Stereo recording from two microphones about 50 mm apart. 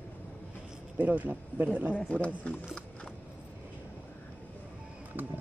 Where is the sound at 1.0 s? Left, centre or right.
Right.